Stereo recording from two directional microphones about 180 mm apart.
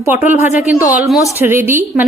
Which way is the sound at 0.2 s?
45° left (ahead or behind).